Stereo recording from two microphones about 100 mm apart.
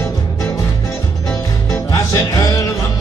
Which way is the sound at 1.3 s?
30° left (ahead or behind).